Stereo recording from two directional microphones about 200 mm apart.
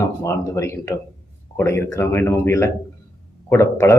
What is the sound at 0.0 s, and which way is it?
A man's voice, 15° left (ahead or behind).